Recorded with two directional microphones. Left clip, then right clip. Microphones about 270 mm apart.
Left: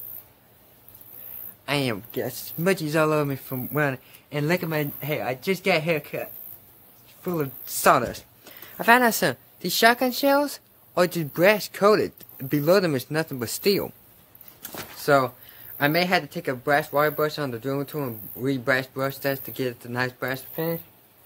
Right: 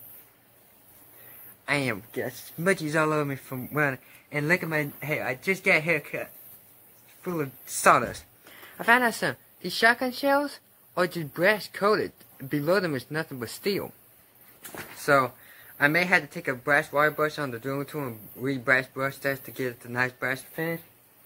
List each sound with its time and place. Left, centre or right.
1.7 s speech: centre
7.2 s speech: centre
15.0 s speech: centre